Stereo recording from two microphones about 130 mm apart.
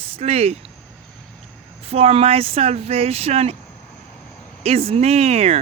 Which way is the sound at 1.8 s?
50° right (ahead or behind).